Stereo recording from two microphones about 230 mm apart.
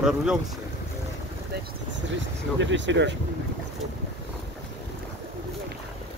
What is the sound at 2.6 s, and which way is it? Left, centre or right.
Speech, right.